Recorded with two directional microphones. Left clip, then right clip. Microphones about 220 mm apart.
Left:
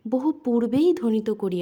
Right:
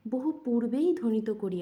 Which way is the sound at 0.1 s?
40° left (ahead or behind).